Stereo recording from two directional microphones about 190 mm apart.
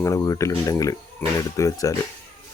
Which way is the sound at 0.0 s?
15° left (ahead or behind).